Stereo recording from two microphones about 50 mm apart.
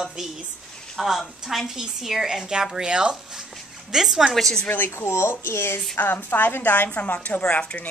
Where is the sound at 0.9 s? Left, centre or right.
Centre.